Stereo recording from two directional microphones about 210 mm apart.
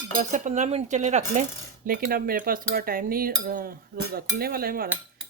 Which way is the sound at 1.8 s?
45° right (ahead or behind).